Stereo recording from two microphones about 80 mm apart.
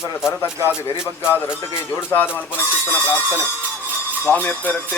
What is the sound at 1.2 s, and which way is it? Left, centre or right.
Speech, left.